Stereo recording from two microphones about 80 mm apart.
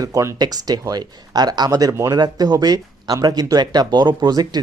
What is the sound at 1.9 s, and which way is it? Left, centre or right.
Speech, right.